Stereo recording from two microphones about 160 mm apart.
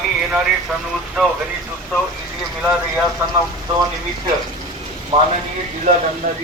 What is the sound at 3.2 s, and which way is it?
Speech, 15° right (ahead or behind).